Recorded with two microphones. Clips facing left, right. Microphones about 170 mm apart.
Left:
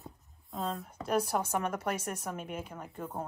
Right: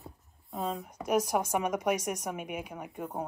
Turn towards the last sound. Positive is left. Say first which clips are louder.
# right 2 dB
turn(degrees=-15)  # may be behind; listen again after turning